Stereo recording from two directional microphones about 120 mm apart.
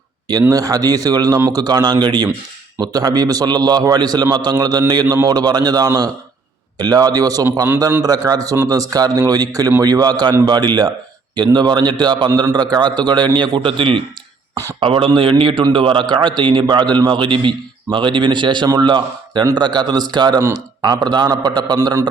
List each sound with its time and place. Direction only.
0.3 s a man's voice: 30° right (ahead or behind)